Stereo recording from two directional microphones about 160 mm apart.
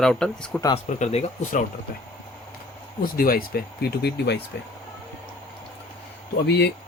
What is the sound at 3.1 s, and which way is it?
Speech, 65° left (ahead or behind).